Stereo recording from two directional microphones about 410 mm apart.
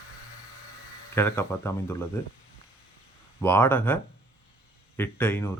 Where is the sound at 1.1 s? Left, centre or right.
Centre.